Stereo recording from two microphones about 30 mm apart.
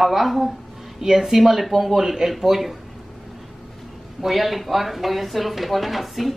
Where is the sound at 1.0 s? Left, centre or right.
Centre.